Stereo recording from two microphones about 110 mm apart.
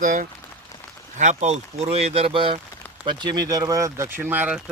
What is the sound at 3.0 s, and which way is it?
Speech, 40° right (ahead or behind).